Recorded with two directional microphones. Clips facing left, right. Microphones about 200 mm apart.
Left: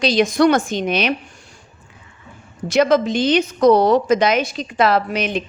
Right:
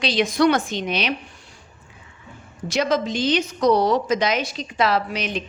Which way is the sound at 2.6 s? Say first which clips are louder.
Left 6 dB; 55° left (ahead or behind).